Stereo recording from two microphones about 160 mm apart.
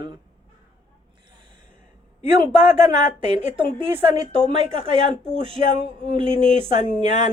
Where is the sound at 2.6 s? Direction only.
45° left (ahead or behind).